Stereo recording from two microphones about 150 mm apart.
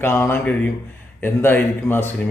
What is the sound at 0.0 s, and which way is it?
A man's voice, 15° left (ahead or behind).